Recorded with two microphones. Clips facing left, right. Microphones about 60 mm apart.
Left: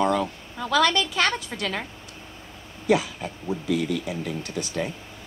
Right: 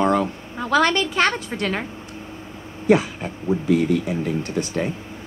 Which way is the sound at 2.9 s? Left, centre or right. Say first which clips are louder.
Right 5 dB; right.